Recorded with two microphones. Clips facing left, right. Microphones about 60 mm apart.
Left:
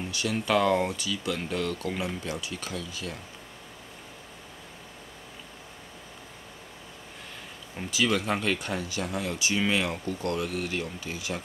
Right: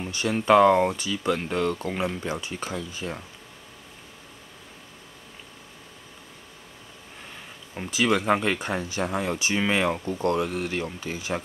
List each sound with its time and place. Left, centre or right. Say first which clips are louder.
0.1 s speech: right 7 dB; right
7.9 s speech: right 4 dB; right